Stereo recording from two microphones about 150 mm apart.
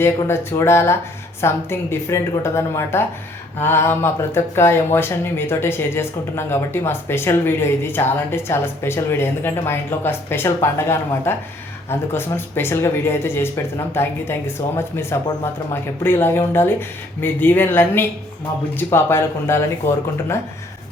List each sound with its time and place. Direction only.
0.0 s speech: 15° left (ahead or behind)